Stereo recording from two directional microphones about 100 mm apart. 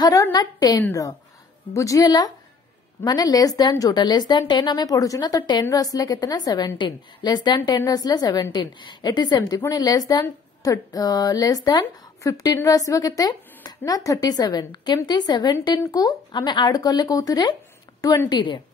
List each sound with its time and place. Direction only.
0.0 s speech: 40° left (ahead or behind)